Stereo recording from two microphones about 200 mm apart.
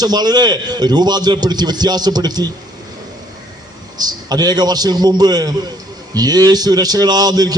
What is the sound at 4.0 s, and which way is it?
A man's voice, 20° right (ahead or behind).